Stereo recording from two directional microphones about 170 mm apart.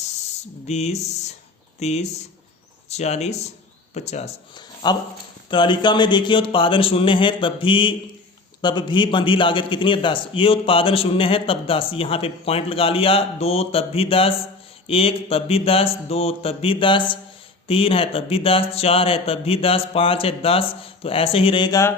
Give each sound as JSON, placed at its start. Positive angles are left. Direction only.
{"t": 0.7, "sound": "a man's voice", "side_deg": 40}
{"t": 4.5, "sound": "a sound", "side_deg": 25}
{"t": 5.5, "sound": "a man's voice", "side_deg": 25}